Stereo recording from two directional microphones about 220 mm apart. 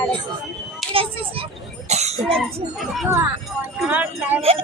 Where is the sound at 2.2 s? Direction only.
5° left (ahead or behind).